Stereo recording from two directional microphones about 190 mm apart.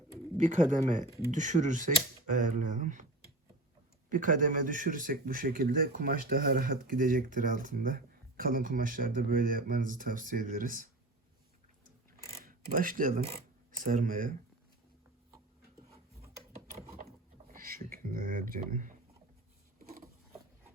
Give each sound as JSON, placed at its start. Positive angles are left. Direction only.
{"t": 0.4, "sound": "speech", "side_deg": -40}
{"t": 4.1, "sound": "speech", "side_deg": -45}
{"t": 12.4, "sound": "speech", "side_deg": -50}
{"t": 17.5, "sound": "speech", "side_deg": -50}